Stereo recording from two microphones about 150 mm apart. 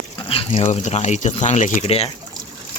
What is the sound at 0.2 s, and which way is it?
Speech, 35° left (ahead or behind).